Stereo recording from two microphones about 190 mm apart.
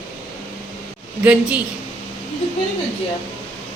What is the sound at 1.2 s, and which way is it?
Speech, 10° right (ahead or behind).